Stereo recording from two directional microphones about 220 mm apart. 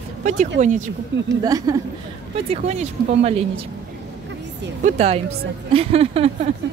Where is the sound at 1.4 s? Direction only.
15° right (ahead or behind).